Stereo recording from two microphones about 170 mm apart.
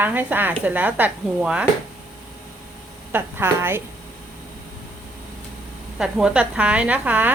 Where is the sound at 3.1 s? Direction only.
15° right (ahead or behind).